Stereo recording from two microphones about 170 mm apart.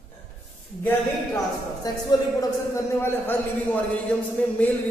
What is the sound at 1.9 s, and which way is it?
Speech, 20° left (ahead or behind).